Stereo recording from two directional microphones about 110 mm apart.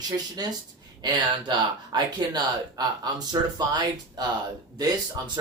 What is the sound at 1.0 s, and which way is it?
Speech, 40° right (ahead or behind).